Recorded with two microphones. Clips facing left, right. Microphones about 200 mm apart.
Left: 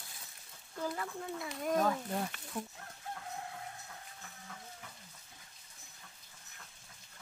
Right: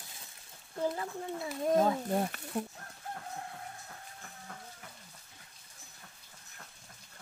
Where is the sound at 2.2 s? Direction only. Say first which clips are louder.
Right 5 dB; 40° right (ahead or behind).